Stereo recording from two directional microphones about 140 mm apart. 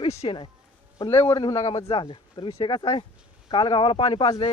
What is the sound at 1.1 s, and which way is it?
Speech, 35° left (ahead or behind).